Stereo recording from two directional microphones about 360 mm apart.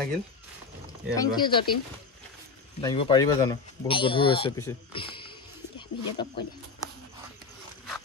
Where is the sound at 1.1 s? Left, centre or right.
Centre.